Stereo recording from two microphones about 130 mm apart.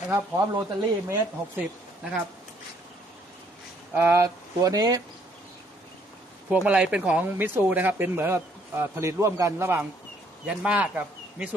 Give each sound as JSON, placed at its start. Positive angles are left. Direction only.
{"t": 0.1, "sound": "speech", "side_deg": -20}
{"t": 3.9, "sound": "speech", "side_deg": -20}
{"t": 6.5, "sound": "speech", "side_deg": -10}